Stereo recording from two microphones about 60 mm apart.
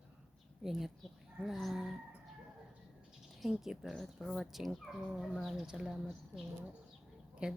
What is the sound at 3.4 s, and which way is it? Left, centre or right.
Speech, centre.